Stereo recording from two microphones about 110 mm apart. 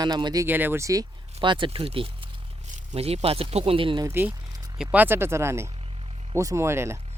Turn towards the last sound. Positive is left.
turn(degrees=-25)  # may be behind; listen again after turning